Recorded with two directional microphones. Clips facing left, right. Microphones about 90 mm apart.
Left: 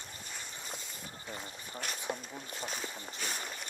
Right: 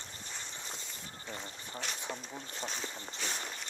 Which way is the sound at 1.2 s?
10° left (ahead or behind).